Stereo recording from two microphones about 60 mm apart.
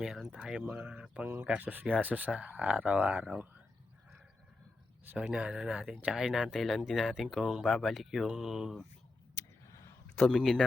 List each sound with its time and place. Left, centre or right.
0.0 s speech: centre
1.1 s speech: right
5.2 s speech: centre
9.3 s a sound: left
10.2 s speech: centre